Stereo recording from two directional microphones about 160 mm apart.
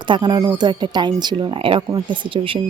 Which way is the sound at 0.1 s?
30° right (ahead or behind).